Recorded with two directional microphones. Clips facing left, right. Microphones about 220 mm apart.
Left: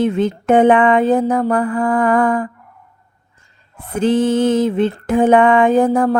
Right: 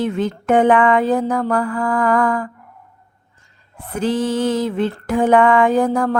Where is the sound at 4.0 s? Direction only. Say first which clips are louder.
Left 4 dB; 25° left (ahead or behind).